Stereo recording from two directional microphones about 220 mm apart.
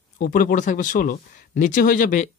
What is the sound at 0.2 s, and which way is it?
Speech, 40° left (ahead or behind).